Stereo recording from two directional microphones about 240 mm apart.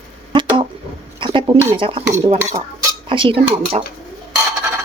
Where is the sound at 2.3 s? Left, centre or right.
Centre.